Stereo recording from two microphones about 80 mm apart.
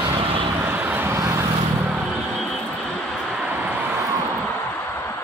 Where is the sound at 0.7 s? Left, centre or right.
Right.